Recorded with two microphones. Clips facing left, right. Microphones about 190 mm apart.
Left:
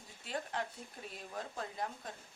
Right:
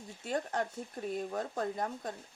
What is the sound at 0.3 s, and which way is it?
Speech, 45° right (ahead or behind).